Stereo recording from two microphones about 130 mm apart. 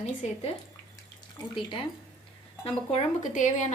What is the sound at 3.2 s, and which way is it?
Speech, 70° left (ahead or behind).